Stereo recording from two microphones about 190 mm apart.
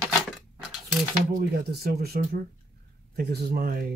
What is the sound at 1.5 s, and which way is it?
Speech, 55° right (ahead or behind).